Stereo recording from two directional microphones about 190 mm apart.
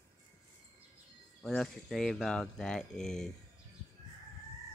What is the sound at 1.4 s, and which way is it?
Speech, centre (ahead or behind).